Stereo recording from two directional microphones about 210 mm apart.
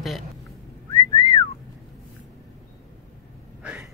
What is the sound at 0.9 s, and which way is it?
Whistling, 20° left (ahead or behind).